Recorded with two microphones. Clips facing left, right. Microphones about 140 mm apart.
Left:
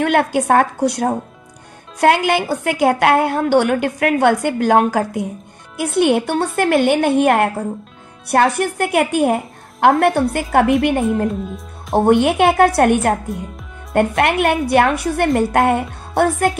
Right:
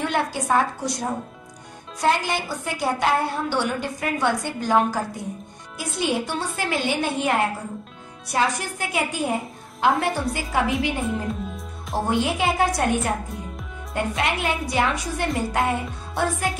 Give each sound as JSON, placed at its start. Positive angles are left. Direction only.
{"t": 0.0, "sound": "a woman's voice", "side_deg": 60}